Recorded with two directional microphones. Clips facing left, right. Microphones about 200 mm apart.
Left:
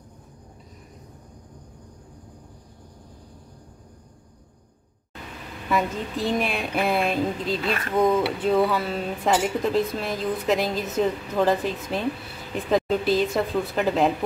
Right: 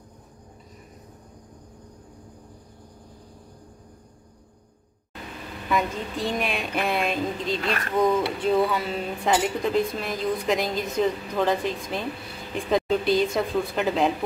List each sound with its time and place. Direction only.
5.7 s speech: centre (ahead or behind)